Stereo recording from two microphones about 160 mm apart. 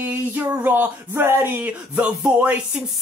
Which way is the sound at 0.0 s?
10° right (ahead or behind).